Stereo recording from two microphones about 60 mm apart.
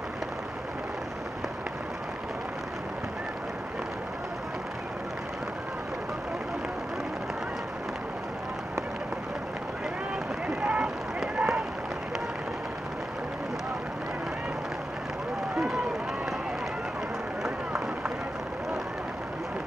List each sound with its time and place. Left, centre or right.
10.7 s run: centre
15.5 s run: centre
17.4 s run: centre